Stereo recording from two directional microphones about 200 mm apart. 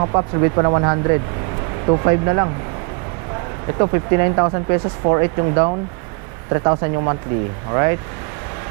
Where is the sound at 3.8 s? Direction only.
20° right (ahead or behind).